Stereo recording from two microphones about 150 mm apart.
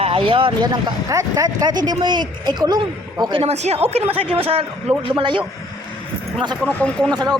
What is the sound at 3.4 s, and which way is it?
Speech, 45° right (ahead or behind).